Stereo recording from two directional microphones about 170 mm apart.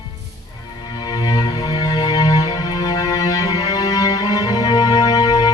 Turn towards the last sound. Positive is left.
turn(degrees=20)  # may be behind; listen again after turning